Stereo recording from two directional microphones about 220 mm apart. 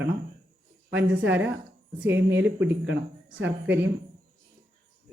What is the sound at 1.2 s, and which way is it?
Speech, 5° right (ahead or behind).